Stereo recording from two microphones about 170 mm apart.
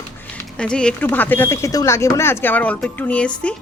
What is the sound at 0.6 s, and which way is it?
A woman's voice, 5° left (ahead or behind).